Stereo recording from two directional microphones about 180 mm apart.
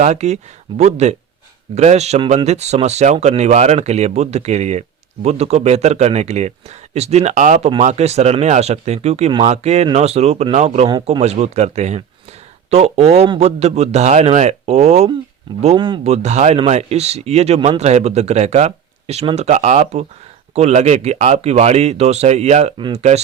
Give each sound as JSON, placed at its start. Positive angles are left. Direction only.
{"t": 0.0, "sound": "a man's voice", "side_deg": -40}
{"t": 15.6, "sound": "speech", "side_deg": -25}
{"t": 16.1, "sound": "a man's voice", "side_deg": -40}